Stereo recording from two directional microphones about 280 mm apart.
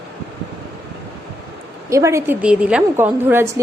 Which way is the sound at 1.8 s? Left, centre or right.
Centre.